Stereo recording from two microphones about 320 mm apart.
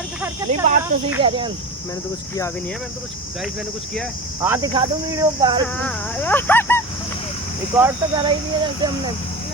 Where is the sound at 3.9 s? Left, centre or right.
Centre.